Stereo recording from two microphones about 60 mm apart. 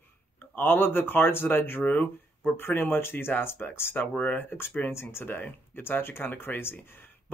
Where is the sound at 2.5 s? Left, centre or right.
Left.